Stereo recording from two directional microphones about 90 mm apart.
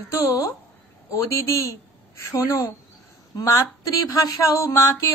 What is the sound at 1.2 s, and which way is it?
Speech, 35° left (ahead or behind).